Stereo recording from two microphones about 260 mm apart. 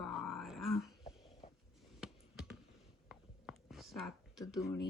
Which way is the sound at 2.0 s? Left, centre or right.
Centre.